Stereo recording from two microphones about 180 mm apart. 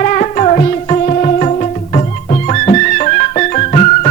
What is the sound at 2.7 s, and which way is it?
Music, 40° left (ahead or behind).